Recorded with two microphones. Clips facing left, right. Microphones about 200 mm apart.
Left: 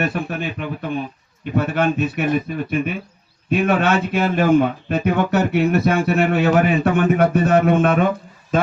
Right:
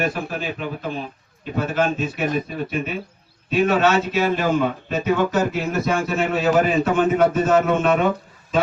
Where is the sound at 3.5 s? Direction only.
55° left (ahead or behind).